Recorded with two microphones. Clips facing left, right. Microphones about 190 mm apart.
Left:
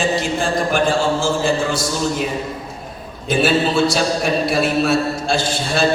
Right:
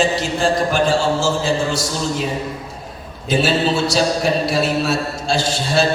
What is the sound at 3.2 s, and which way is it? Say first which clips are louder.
A man's voice: left 1 dB; 55° left (ahead or behind).